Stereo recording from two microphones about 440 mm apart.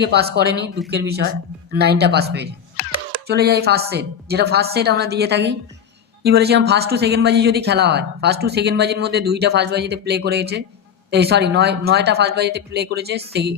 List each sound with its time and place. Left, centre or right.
0.0 s a man's voice: right